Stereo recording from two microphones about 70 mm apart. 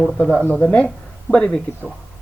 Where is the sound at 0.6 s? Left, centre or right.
Centre.